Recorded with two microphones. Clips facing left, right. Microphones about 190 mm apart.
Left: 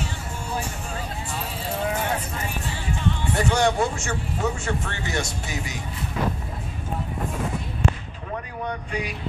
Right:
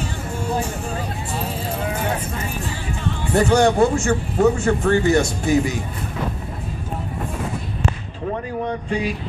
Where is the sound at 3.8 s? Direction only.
55° right (ahead or behind).